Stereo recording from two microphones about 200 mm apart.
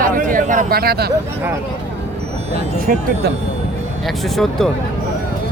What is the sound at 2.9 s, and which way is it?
Speech, 45° right (ahead or behind).